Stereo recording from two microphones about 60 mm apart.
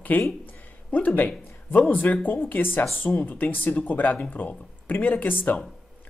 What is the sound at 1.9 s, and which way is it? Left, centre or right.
Speech, left.